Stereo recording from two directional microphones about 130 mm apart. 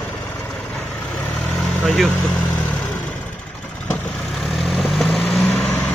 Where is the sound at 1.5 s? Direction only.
Centre (ahead or behind).